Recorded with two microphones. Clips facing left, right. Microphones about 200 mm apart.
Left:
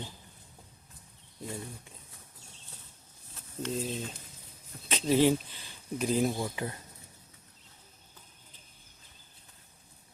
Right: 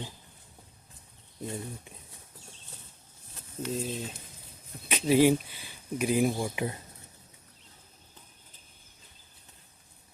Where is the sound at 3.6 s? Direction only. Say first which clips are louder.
Right 1 dB; centre (ahead or behind).